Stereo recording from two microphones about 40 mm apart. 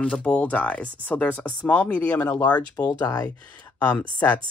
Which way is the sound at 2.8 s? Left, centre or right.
Left.